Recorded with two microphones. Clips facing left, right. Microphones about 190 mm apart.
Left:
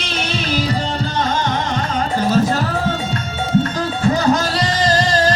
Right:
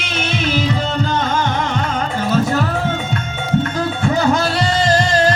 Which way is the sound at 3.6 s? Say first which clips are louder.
Even; 35° left (ahead or behind).